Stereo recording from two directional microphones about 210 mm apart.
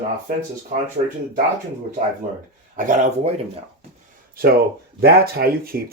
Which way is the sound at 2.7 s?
35° right (ahead or behind).